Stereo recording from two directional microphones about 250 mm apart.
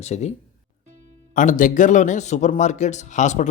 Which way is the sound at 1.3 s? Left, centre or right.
Left.